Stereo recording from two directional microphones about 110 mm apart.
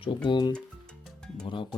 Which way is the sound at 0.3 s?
45° left (ahead or behind).